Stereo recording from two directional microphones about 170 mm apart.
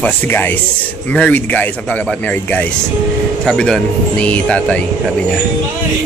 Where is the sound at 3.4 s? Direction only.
5° left (ahead or behind).